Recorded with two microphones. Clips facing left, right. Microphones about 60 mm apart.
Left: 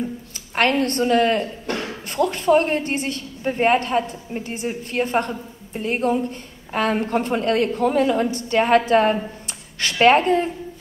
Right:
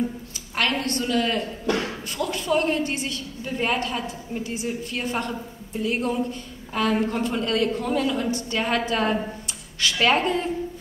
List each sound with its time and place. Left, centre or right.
0.6 s a woman's voice: left